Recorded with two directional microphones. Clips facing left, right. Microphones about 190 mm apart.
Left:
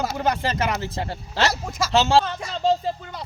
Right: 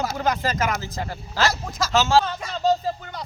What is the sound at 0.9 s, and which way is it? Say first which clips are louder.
Speech: left 1 dB; 25° left (ahead or behind).